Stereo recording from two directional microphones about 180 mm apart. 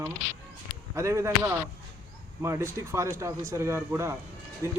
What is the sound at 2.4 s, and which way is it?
Speech, 15° right (ahead or behind).